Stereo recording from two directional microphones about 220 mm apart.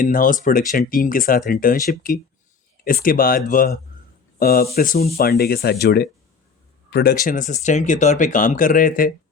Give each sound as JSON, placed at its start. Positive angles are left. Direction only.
{"t": 0.0, "sound": "speech", "side_deg": 40}
{"t": 5.1, "sound": "speech", "side_deg": 45}